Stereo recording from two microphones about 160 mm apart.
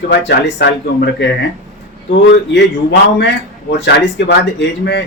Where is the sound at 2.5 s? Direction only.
90° left.